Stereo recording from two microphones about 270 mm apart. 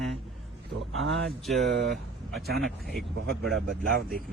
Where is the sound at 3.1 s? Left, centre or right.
Right.